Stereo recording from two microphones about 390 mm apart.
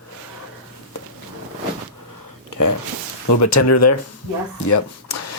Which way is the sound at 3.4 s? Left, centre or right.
Left.